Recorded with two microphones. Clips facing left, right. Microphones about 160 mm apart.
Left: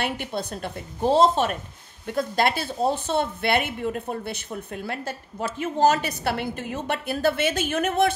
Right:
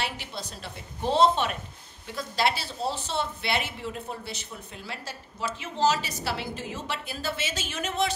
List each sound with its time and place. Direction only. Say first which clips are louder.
0.0 s a woman's voice: left 6 dB; 55° left (ahead or behind)